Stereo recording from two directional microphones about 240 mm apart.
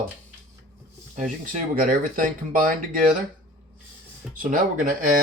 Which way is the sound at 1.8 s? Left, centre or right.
Right.